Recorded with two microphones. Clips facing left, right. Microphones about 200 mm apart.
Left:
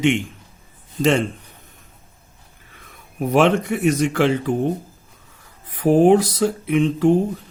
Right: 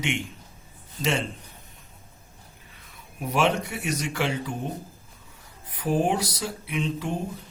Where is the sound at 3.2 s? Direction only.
55° left (ahead or behind).